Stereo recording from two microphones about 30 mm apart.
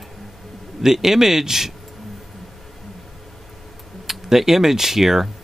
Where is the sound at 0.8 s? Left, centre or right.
Centre.